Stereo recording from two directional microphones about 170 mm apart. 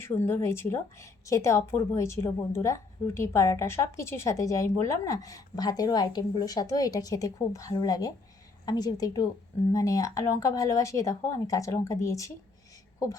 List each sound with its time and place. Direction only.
0.0 s a woman's voice: 15° left (ahead or behind)